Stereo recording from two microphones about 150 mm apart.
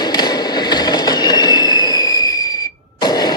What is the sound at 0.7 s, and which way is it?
Train, 25° left (ahead or behind).